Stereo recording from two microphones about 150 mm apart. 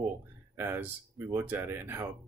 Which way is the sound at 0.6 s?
15° right (ahead or behind).